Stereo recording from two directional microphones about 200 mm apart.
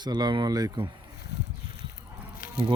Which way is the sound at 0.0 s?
20° right (ahead or behind).